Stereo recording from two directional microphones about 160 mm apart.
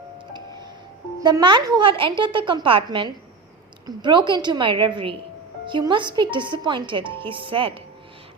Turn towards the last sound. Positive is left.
turn(degrees=-35)  # may be behind; listen again after turning